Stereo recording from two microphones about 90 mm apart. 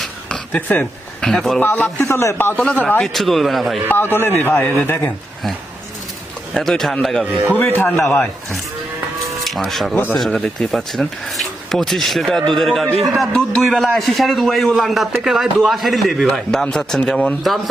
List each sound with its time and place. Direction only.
0.0 s a sound: 10° left (ahead or behind)
0.5 s a man's voice: 20° left (ahead or behind)
1.2 s speech: 5° left (ahead or behind)
1.6 s a man's voice: 20° left (ahead or behind)
2.0 s a man's voice: 30° left (ahead or behind)
2.6 s speech: 10° left (ahead or behind)
3.8 s a man's voice: 25° left (ahead or behind)
6.5 s speech: 5° left (ahead or behind)
7.5 s a man's voice: 25° left (ahead or behind)
8.0 s speech: 5° left (ahead or behind)
9.9 s a man's voice: 20° left (ahead or behind)
10.2 s speech: centre (ahead or behind)